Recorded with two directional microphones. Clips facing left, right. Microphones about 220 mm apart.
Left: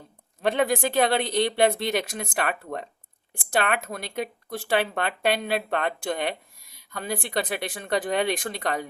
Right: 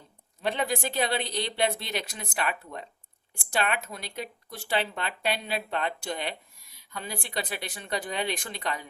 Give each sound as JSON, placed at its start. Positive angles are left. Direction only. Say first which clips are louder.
{"t": 0.4, "sound": "speech", "louder": "left 6 dB", "side_deg": 50}